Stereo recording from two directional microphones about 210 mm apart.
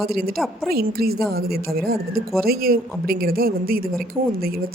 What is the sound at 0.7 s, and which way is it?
A woman's voice, 45° right (ahead or behind).